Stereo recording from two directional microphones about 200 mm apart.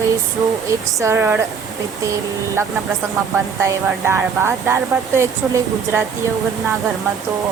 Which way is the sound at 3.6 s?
15° right (ahead or behind).